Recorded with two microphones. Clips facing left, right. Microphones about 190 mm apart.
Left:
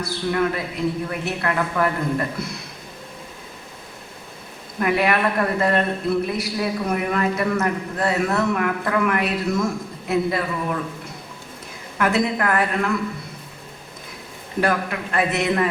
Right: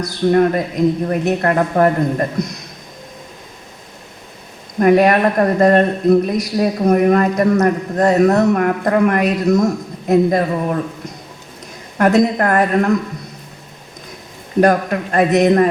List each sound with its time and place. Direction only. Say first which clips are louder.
0.0 s speech: right 8 dB; 40° right (ahead or behind)
4.8 s speech: right 8 dB; 40° right (ahead or behind)
14.6 s speech: right 8 dB; 40° right (ahead or behind)